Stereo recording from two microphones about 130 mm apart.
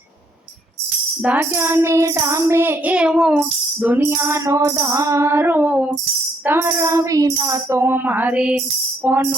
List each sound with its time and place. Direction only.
1.2 s music: 15° right (ahead or behind)